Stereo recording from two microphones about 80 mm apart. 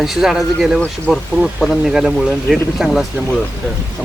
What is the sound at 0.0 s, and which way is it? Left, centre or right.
Speech, centre.